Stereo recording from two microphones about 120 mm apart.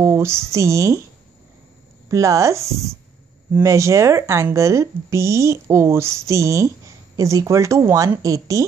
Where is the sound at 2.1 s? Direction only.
25° right (ahead or behind).